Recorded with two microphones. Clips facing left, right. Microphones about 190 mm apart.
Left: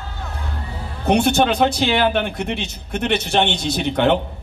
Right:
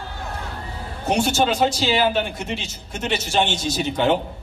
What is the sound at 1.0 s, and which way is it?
A man's voice, 60° left (ahead or behind).